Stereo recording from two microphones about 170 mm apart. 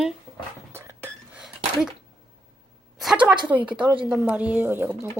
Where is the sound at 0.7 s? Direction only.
15° right (ahead or behind).